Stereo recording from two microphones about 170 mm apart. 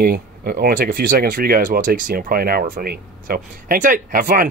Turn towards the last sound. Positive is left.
turn(degrees=-55)  # may be behind; listen again after turning